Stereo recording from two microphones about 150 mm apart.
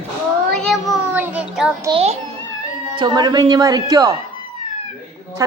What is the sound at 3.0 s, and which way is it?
A woman's voice, 30° right (ahead or behind).